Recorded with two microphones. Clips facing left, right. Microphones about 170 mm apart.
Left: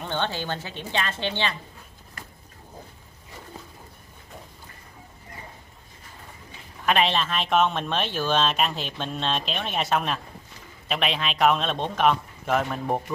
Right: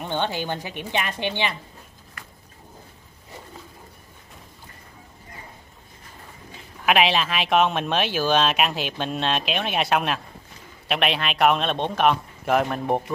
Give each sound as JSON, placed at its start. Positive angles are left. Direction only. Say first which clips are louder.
{"t": 0.0, "sound": "speech", "louder": "right 2 dB", "side_deg": -15}
{"t": 6.9, "sound": "a man's voice", "louder": "right 2 dB", "side_deg": -5}